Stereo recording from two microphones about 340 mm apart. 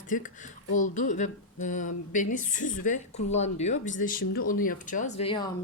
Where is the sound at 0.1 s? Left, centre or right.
Left.